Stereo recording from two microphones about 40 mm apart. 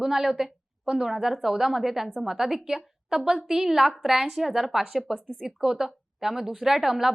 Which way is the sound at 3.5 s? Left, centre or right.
Centre.